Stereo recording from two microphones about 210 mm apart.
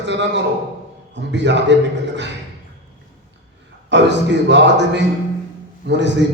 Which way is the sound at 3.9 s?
55° right (ahead or behind).